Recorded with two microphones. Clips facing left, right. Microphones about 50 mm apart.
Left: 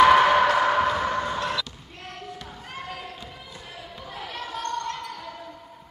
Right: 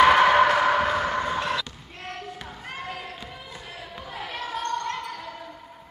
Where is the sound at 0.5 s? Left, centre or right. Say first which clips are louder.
Even; centre.